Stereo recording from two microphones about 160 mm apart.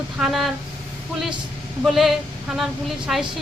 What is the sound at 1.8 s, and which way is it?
A woman's voice, centre (ahead or behind).